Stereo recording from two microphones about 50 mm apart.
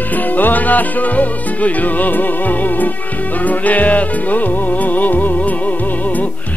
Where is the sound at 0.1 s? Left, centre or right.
Left.